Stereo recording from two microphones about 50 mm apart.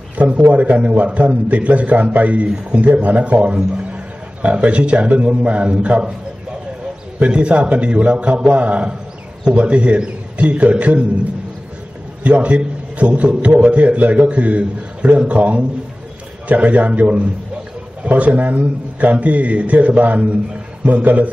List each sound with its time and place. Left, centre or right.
0.2 s a man's voice: right
7.2 s a man's voice: centre
12.2 s a man's voice: right